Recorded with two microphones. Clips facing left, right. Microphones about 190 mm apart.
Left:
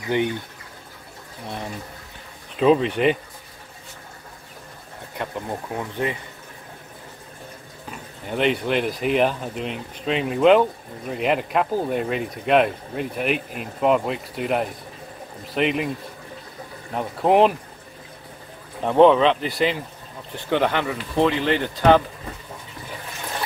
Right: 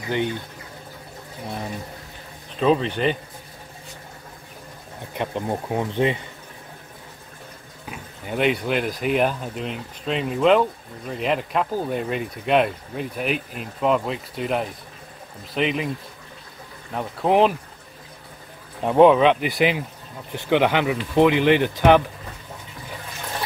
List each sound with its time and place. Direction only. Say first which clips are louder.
0.1 s speech: left 2 dB; 15° left (ahead or behind)
2.6 s speech: left 3 dB; 5° left (ahead or behind)
5.1 s speech: right 3 dB; 20° right (ahead or behind)
7.9 s speech: even; 5° right (ahead or behind)
16.9 s speech: left 1 dB; 5° left (ahead or behind)
18.9 s speech: even; 10° right (ahead or behind)